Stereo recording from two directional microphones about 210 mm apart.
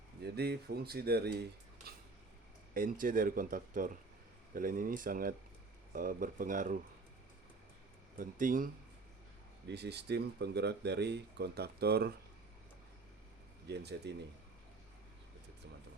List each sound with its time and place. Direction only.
0.3 s speech: 50° right (ahead or behind)
2.7 s speech: 40° right (ahead or behind)
8.2 s speech: 40° right (ahead or behind)
9.6 s speech: 55° right (ahead or behind)
13.7 s speech: 50° right (ahead or behind)